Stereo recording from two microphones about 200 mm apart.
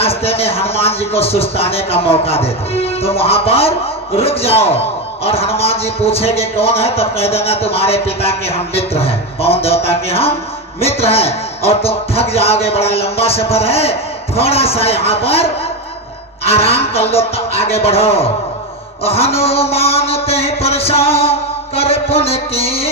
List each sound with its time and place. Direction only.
0.0 s a man's voice: 30° left (ahead or behind)